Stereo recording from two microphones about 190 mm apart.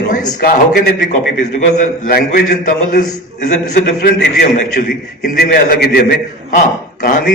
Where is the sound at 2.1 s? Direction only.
55° left (ahead or behind).